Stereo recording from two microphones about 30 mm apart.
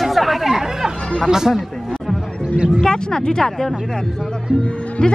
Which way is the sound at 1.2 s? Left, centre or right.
Centre.